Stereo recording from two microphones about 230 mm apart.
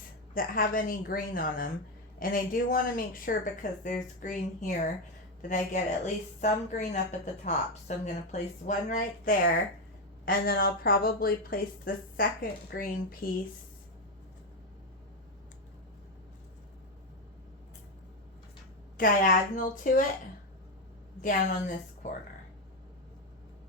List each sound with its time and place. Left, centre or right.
0.3 s a woman's voice: left
18.9 s a woman's voice: left
21.2 s a woman's voice: left